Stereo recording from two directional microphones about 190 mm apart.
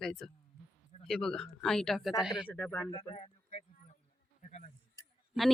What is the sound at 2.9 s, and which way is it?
Speech, 30° left (ahead or behind).